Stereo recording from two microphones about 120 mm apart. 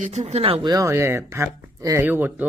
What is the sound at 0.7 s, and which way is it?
Speech, 25° right (ahead or behind).